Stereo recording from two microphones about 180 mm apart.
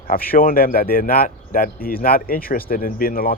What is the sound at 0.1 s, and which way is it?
Speech, 55° left (ahead or behind).